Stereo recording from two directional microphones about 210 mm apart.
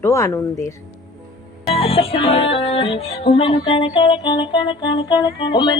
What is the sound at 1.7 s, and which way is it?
Music, 25° left (ahead or behind).